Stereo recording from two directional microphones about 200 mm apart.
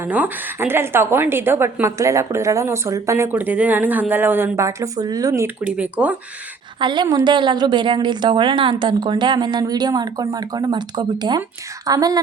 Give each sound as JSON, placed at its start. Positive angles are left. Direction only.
{"t": 0.0, "sound": "a woman's voice", "side_deg": -10}
{"t": 6.7, "sound": "a woman's voice", "side_deg": -25}